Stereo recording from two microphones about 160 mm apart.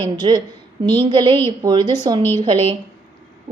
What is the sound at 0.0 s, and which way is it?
A woman's voice, 25° right (ahead or behind).